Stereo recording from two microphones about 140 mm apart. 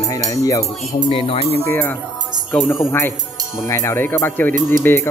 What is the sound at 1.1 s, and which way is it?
Speech, 45° left (ahead or behind).